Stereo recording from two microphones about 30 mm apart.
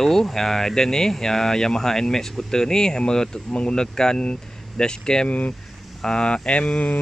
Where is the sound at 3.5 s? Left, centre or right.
Left.